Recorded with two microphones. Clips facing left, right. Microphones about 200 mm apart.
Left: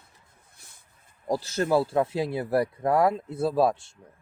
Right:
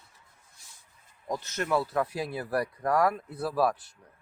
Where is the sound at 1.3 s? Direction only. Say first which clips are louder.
Left 5 dB; 30° left (ahead or behind).